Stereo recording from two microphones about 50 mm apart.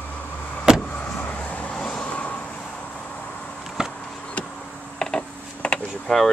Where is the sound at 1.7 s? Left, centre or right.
Centre.